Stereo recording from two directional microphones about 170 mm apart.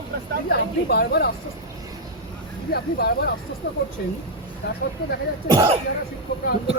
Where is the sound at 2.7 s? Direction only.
65° left (ahead or behind).